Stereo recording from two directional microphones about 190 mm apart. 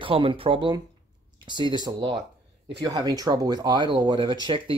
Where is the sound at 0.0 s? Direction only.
25° right (ahead or behind).